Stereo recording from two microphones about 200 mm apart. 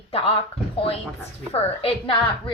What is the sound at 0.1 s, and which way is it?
Speech, 30° left (ahead or behind).